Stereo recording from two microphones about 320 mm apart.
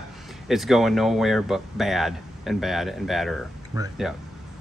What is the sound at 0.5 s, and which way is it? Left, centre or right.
Speech, centre.